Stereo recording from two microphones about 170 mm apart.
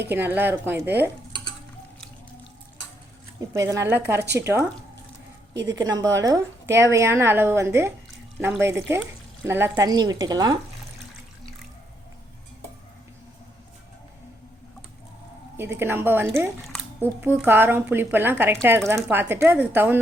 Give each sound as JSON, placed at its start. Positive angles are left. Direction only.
{"t": 0.0, "sound": "a woman's voice", "side_deg": -10}
{"t": 3.5, "sound": "a woman's voice", "side_deg": -20}
{"t": 5.9, "sound": "a woman's voice", "side_deg": -20}
{"t": 15.5, "sound": "a woman's voice", "side_deg": -15}